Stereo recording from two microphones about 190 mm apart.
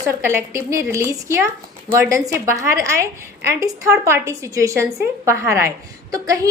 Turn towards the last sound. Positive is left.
turn(degrees=-15)  # may be behind; listen again after turning